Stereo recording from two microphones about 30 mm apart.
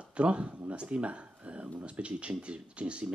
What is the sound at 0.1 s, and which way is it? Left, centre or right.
Speech, right.